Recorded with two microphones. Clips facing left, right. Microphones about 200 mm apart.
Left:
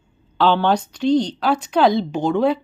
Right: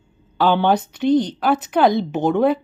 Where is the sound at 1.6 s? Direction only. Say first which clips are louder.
Left 1 dB; 5° right (ahead or behind).